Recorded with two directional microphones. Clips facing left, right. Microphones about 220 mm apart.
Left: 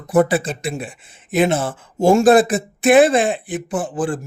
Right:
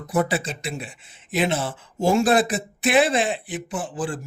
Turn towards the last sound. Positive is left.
turn(degrees=50)  # may be behind; listen again after turning